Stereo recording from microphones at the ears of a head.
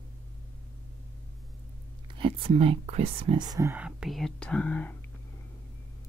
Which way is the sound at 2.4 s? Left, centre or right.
Right.